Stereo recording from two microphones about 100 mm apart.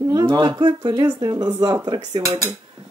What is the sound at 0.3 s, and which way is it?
Speech, 55° right (ahead or behind).